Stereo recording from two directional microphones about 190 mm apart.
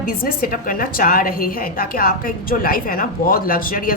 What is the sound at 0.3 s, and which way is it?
A woman's voice, 50° left (ahead or behind).